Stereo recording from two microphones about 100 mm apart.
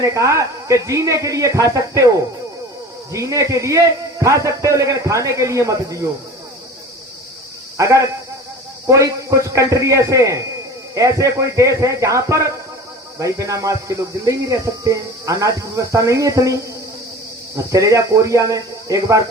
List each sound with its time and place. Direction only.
0.0 s speech: 30° right (ahead or behind)
7.8 s a man's voice: 30° right (ahead or behind)
17.7 s speech: 35° right (ahead or behind)